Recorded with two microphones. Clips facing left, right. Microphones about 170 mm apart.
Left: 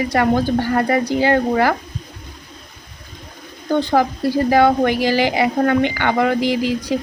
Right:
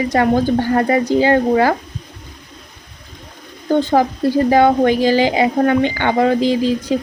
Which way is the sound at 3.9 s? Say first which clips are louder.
Right 2 dB; 15° right (ahead or behind).